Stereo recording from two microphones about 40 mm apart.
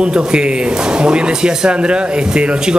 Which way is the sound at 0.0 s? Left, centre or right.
Right.